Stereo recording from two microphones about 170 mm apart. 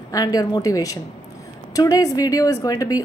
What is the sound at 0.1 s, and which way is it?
A woman's voice, 20° left (ahead or behind).